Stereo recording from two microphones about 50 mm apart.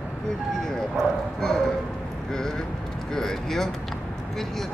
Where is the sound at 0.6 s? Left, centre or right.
Centre.